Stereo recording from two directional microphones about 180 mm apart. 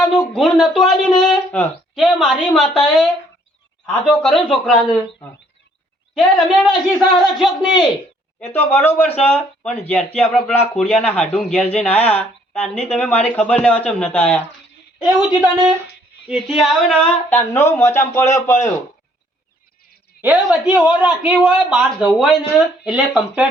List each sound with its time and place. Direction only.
0.0 s speech: centre (ahead or behind)
6.1 s speech: centre (ahead or behind)
8.5 s a man's voice: 10° left (ahead or behind)
15.2 s a man's voice: 5° right (ahead or behind); by 18.7 s 15° left (ahead or behind)
20.2 s a man's voice: 10° right (ahead or behind)